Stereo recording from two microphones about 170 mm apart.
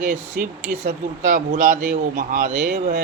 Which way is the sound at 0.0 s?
50° right (ahead or behind).